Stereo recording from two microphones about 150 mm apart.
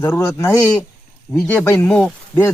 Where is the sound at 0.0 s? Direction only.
15° left (ahead or behind).